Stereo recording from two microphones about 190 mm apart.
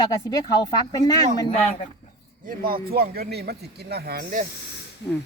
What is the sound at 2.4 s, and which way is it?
A man's voice, 50° right (ahead or behind).